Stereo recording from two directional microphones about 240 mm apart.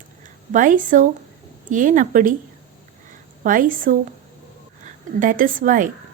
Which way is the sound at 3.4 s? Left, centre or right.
Right.